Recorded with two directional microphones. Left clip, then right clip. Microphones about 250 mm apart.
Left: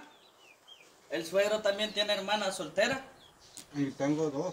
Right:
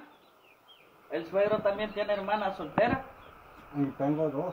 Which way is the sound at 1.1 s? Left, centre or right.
Left.